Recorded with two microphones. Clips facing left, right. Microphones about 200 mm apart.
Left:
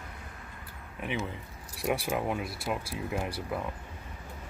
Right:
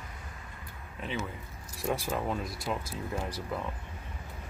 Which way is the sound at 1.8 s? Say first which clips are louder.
Left 2 dB; 15° left (ahead or behind).